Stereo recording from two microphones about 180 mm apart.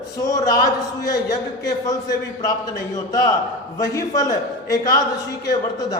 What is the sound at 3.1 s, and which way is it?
A man's voice, 20° left (ahead or behind).